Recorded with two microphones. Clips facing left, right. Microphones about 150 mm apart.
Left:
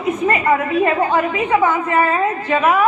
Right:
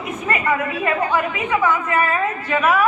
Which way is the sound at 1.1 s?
25° left (ahead or behind).